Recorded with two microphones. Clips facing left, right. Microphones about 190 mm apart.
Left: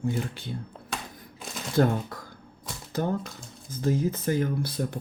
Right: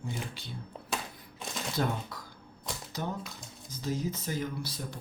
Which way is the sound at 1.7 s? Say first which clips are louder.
Left 10 dB; 50° left (ahead or behind).